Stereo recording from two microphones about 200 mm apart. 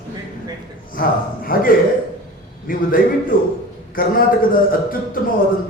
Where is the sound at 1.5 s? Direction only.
45° left (ahead or behind).